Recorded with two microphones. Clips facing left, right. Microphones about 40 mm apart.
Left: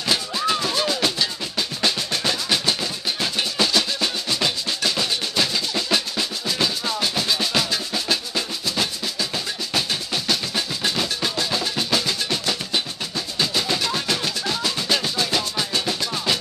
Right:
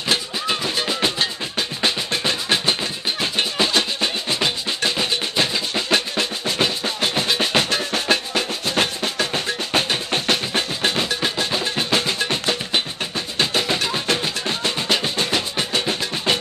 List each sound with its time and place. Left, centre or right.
0.6 s music: centre; by 11.0 s right
11.0 s percussion: right
13.4 s music: right